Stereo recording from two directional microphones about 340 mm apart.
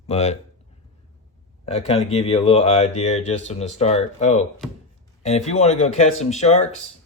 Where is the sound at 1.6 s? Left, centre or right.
Centre.